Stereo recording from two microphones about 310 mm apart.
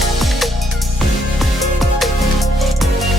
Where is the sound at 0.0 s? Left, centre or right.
Centre.